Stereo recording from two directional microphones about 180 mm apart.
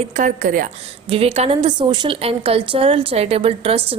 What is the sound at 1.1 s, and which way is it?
A woman's voice, 30° right (ahead or behind).